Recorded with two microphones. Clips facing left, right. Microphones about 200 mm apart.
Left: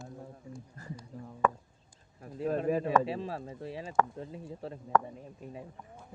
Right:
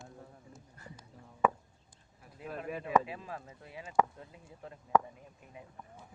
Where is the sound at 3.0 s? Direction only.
30° left (ahead or behind).